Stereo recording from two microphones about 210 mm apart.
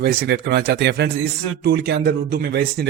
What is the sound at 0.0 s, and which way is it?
Speech, 50° right (ahead or behind).